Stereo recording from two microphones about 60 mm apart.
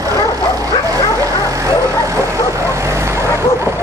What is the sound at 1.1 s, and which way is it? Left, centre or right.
Bow-wow, right.